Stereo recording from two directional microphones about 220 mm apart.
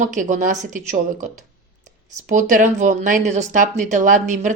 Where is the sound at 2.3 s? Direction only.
35° right (ahead or behind).